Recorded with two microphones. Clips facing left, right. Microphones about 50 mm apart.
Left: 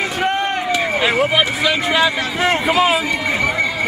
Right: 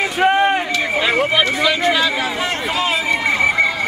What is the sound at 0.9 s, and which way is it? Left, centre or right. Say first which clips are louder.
Speech: even; centre.